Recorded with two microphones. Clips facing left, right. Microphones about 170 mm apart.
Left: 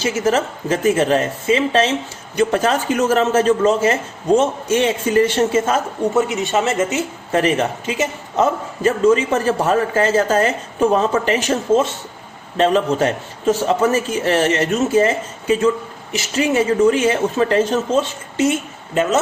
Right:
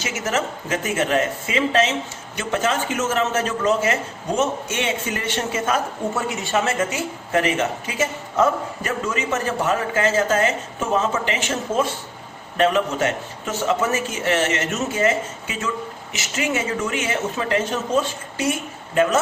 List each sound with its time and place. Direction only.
0.0 s a woman's voice: 30° left (ahead or behind)
7.9 s a woman's voice: 20° left (ahead or behind); by 11.5 s 40° left (ahead or behind)
12.5 s a woman's voice: 30° left (ahead or behind)